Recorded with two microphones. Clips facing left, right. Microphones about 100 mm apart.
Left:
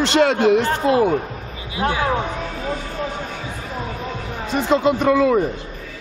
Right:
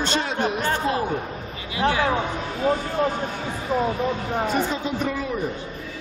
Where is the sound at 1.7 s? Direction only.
25° left (ahead or behind).